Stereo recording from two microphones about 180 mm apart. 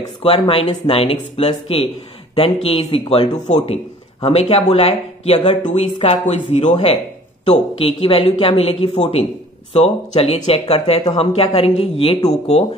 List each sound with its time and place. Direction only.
0.2 s speech: 30° left (ahead or behind)